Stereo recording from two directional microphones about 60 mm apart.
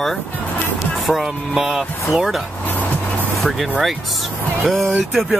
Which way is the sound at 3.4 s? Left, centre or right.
Centre.